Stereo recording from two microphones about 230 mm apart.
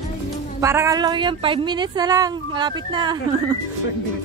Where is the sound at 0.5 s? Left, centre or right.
Centre.